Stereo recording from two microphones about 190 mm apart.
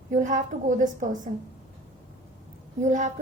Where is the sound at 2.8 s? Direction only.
40° right (ahead or behind).